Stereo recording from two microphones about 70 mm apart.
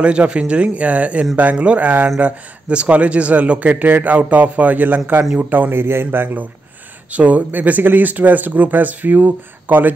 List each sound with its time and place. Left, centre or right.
0.0 s a man's voice: centre; by 6.4 s right
7.1 s a man's voice: right